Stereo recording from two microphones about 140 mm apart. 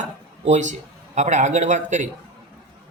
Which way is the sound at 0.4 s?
60° right (ahead or behind).